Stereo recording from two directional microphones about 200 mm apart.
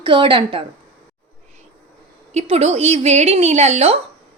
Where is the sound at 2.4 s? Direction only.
30° right (ahead or behind).